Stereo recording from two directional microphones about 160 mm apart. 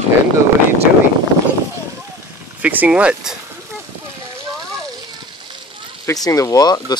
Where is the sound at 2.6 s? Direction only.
10° right (ahead or behind).